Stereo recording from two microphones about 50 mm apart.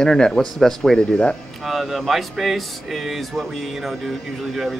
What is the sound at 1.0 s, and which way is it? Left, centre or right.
Speech, left.